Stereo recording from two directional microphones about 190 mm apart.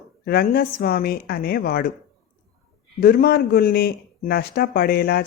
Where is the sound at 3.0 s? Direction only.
50° left (ahead or behind).